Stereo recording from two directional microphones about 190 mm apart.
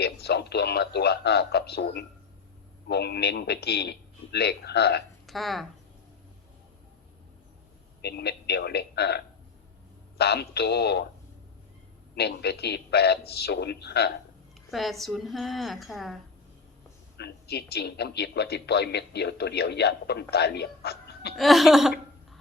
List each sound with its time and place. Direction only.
0.0 s speech: 60° left (ahead or behind)
5.2 s speech: centre (ahead or behind)
8.0 s speech: 60° left (ahead or behind)
12.1 s speech: 60° left (ahead or behind)
14.7 s a woman's voice: centre (ahead or behind)
17.2 s speech: 60° left (ahead or behind)
21.3 s speech: centre (ahead or behind)